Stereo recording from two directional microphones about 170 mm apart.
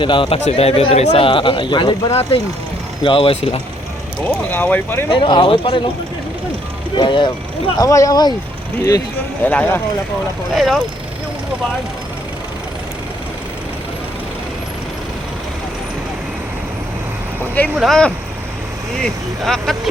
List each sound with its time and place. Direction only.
0.0 s speech: 30° left (ahead or behind)
4.5 s speech: 10° left (ahead or behind)
5.1 s speech: 30° left (ahead or behind)
7.0 s speech: 30° left (ahead or behind)
9.4 s speech: 10° left (ahead or behind)
10.5 s speech: centre (ahead or behind)
17.7 s speech: centre (ahead or behind)